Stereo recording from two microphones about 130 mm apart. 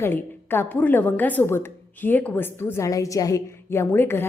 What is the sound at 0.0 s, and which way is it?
A woman's voice, 15° left (ahead or behind).